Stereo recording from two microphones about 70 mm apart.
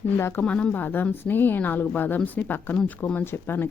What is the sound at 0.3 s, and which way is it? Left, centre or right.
A woman's voice, centre.